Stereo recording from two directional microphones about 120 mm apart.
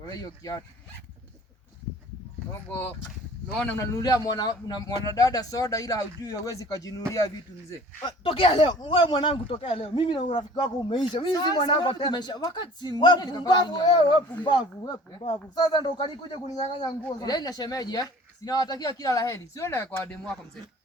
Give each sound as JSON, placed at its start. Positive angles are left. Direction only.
{"t": 0.0, "sound": "speech", "side_deg": 30}
{"t": 2.5, "sound": "speech", "side_deg": 15}
{"t": 3.8, "sound": "speech", "side_deg": 30}
{"t": 7.7, "sound": "speech", "side_deg": 40}